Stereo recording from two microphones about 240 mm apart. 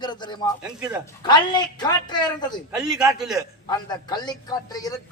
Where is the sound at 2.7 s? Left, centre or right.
Centre.